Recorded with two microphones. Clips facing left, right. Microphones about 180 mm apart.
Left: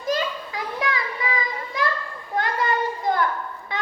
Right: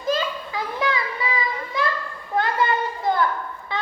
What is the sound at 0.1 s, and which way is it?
Children playing, 30° right (ahead or behind).